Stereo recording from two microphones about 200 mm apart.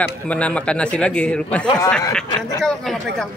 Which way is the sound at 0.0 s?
5° left (ahead or behind).